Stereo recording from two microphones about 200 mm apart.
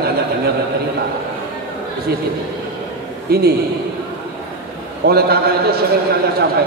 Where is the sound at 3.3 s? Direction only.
50° right (ahead or behind).